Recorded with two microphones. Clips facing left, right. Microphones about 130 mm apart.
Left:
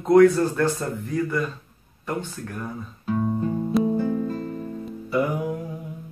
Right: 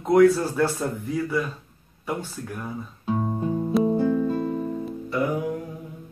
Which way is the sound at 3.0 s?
25° right (ahead or behind).